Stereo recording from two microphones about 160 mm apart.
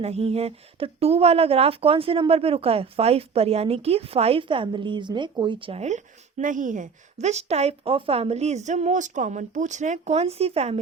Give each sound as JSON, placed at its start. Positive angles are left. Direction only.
{"t": 0.0, "sound": "speech", "side_deg": -40}